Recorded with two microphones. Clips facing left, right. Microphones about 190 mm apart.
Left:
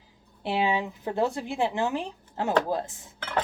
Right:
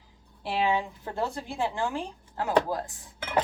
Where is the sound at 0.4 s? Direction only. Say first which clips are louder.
Left 1 dB; 20° left (ahead or behind).